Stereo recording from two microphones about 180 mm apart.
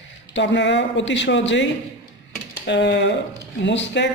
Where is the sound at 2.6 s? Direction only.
80° left.